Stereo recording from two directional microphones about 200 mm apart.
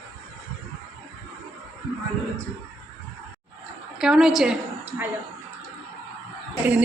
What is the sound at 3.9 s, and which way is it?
A woman's voice, 5° right (ahead or behind).